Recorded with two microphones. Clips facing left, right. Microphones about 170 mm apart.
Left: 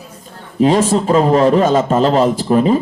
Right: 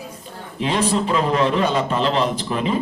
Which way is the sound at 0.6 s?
45° left (ahead or behind).